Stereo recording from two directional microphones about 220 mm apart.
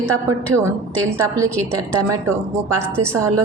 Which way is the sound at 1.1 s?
15° right (ahead or behind).